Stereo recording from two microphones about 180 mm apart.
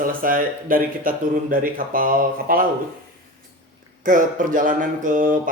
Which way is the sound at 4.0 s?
45° right (ahead or behind).